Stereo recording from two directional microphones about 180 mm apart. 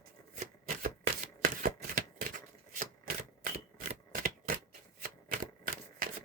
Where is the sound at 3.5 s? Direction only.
35° right (ahead or behind).